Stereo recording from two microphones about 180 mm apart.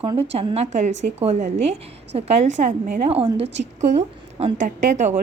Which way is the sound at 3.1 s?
30° right (ahead or behind).